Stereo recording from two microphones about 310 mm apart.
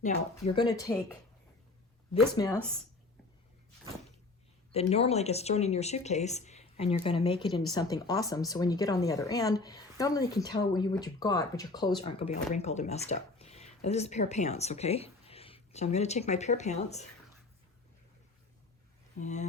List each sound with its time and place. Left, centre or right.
0.3 s speech: centre
2.3 s speech: centre
4.7 s speech: centre
19.2 s speech: left